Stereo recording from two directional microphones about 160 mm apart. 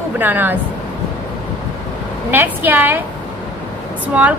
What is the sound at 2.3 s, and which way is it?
Speech, 10° right (ahead or behind).